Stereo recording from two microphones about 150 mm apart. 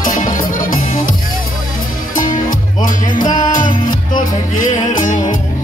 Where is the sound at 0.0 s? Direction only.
60° left (ahead or behind).